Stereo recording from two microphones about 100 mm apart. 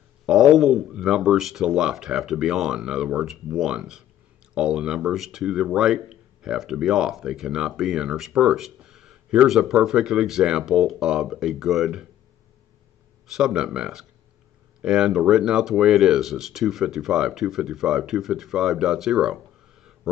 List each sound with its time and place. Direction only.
0.3 s speech: 5° right (ahead or behind)
13.3 s speech: 5° right (ahead or behind)